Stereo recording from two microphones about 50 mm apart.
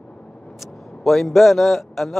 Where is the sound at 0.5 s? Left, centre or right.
Centre.